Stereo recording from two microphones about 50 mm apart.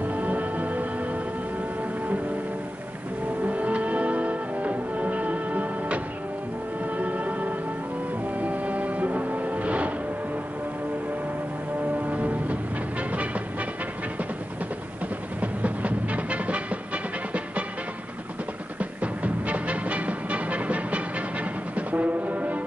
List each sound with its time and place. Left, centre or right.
0.0 s music: right
3.4 s music: right
7.0 s music: right
12.0 s music: right
15.4 s music: right
18.8 s music: right
21.7 s brass instrument: right